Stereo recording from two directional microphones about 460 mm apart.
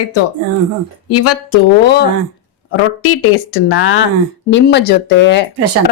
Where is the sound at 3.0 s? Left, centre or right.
Left.